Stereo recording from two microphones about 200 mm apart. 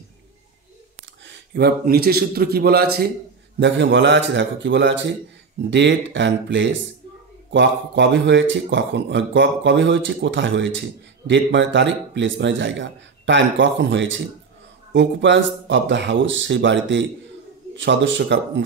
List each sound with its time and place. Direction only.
1.2 s a man's voice: 60° right (ahead or behind)
3.5 s a man's voice: 65° right (ahead or behind)